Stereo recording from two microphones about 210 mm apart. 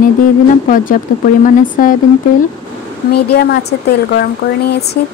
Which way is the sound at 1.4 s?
40° left (ahead or behind).